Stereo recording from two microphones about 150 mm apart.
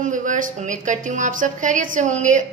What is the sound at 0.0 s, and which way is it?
A woman's voice, 60° right (ahead or behind).